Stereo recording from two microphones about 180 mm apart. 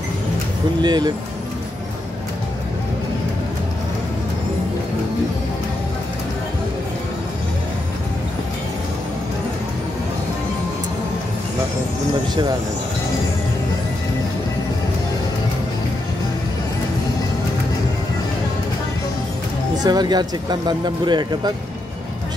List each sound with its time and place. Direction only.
0.8 s speech: 25° right (ahead or behind)
19.8 s speech: 25° right (ahead or behind)